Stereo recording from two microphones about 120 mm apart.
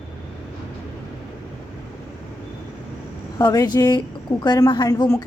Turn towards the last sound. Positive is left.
turn(degrees=30)  # may be behind; listen again after turning